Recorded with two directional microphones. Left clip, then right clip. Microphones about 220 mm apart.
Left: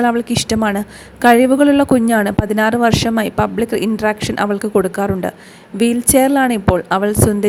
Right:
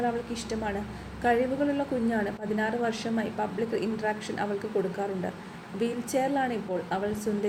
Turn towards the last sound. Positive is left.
turn(degrees=45)  # may be behind; listen again after turning